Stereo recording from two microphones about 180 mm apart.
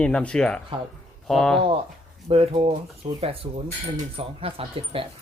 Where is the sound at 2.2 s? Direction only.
35° right (ahead or behind).